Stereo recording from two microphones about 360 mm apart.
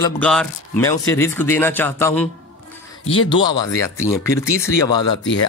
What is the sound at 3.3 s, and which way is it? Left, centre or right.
Speech, centre.